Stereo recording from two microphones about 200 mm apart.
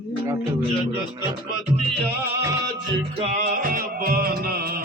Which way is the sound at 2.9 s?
30° right (ahead or behind).